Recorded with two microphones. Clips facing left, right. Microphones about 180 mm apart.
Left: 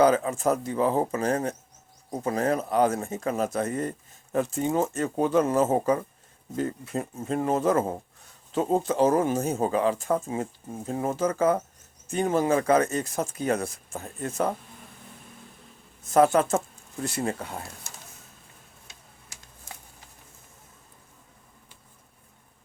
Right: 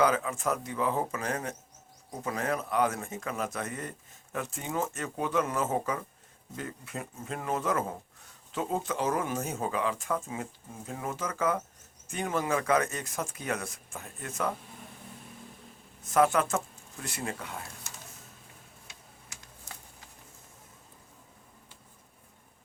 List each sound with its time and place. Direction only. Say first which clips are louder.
0.0 s speech: left 6 dB; 30° left (ahead or behind)
16.1 s speech: left 5 dB; 30° left (ahead or behind)